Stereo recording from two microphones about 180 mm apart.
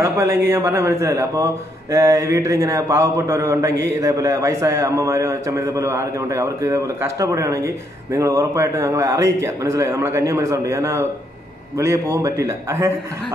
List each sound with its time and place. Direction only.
0.0 s speech: 15° right (ahead or behind)